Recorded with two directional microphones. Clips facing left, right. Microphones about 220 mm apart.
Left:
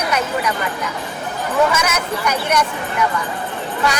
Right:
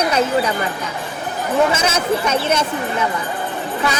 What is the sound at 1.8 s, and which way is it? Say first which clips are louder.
Speech: right 3 dB; 30° right (ahead or behind).